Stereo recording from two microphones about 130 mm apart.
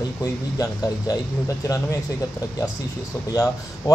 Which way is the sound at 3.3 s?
25° left (ahead or behind).